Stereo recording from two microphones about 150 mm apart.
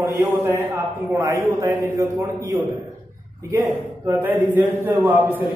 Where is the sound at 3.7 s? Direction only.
15° right (ahead or behind).